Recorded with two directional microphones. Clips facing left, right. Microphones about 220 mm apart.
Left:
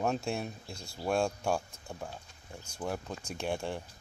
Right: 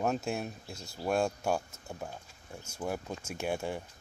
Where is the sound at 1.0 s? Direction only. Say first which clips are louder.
Even; 5° right (ahead or behind).